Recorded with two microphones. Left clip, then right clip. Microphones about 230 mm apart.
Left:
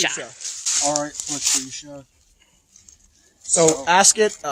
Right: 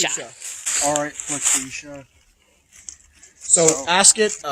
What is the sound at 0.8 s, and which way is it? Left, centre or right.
Speech, centre.